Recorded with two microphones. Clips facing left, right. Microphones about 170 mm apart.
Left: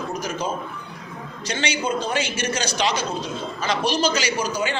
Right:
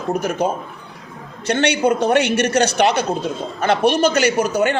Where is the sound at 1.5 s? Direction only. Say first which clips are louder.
Right 8 dB; 65° right (ahead or behind).